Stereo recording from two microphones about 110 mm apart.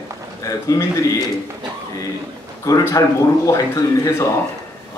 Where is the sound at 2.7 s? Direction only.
30° left (ahead or behind).